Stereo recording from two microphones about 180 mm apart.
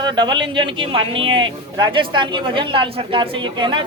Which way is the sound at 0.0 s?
25° right (ahead or behind).